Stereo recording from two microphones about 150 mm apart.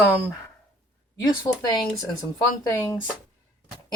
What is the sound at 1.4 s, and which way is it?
Speech, 25° left (ahead or behind).